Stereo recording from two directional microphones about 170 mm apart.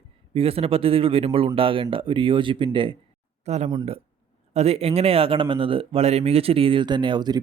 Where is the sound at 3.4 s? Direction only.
40° right (ahead or behind).